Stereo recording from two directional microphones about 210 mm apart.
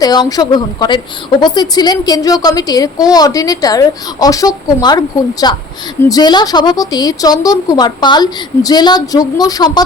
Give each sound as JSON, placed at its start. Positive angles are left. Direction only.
{"t": 0.0, "sound": "a woman's voice", "side_deg": 20}